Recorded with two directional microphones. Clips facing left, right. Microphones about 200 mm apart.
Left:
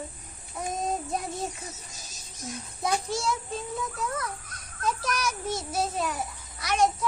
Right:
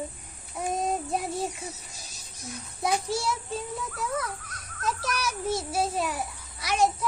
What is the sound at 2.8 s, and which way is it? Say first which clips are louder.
Speech: right 1 dB; 5° right (ahead or behind).